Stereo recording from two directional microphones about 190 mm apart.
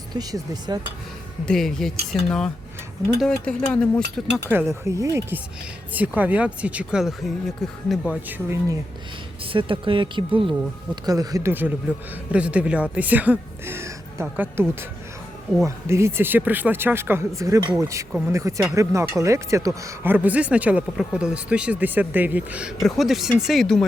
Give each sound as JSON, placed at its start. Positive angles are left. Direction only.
{"t": 0.2, "sound": "speech", "side_deg": -20}
{"t": 1.5, "sound": "speech", "side_deg": 0}
{"t": 4.4, "sound": "speech", "side_deg": -15}
{"t": 9.5, "sound": "speech", "side_deg": -25}